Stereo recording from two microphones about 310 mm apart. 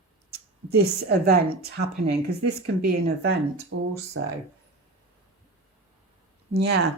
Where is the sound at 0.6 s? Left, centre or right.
Right.